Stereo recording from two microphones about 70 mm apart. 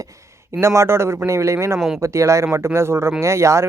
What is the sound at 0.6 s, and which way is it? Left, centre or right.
Speech, right.